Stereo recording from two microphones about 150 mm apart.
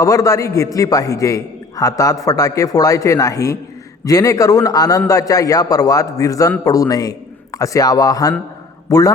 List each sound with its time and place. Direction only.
0.0 s a man's voice: 25° left (ahead or behind)